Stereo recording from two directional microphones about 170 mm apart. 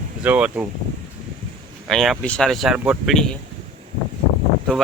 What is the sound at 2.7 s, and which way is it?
Speech, 10° right (ahead or behind).